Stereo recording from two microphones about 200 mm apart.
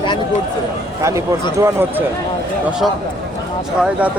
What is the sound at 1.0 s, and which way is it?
Speech, 15° right (ahead or behind).